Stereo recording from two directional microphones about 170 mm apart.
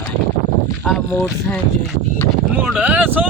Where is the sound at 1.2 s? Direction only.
5° left (ahead or behind).